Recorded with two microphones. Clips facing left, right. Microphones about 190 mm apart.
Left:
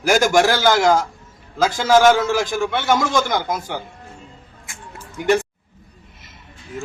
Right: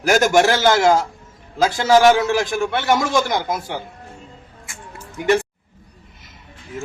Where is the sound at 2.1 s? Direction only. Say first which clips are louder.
Right 1 dB; centre (ahead or behind).